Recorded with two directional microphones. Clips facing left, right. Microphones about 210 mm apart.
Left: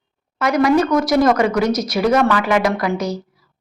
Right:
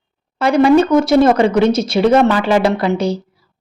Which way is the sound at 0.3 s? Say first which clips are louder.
Right 4 dB; 30° right (ahead or behind).